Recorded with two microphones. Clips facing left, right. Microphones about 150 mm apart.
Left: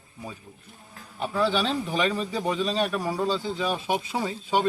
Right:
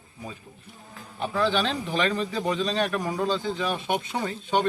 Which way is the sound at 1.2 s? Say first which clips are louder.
Even; 5° left (ahead or behind).